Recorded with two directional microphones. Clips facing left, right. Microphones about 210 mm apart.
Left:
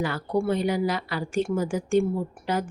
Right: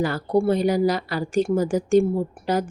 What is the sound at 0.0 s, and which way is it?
A woman's voice, 35° right (ahead or behind).